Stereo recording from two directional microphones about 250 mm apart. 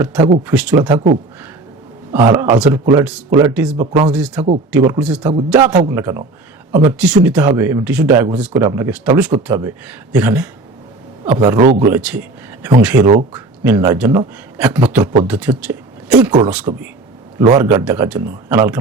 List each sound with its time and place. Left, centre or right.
0.0 s speech: centre
2.1 s speech: centre